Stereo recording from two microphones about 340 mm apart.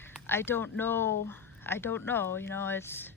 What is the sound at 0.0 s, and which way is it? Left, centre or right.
Speech, centre.